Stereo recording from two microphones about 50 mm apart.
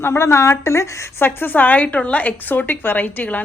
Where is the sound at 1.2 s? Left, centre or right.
Left.